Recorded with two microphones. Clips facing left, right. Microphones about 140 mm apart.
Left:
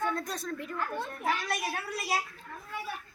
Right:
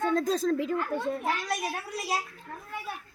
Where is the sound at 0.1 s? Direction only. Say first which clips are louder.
Right 9 dB; 90° right.